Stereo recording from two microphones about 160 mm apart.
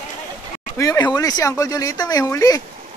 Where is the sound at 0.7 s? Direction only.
25° left (ahead or behind).